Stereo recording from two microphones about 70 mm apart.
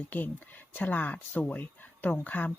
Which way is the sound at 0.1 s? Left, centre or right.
Left.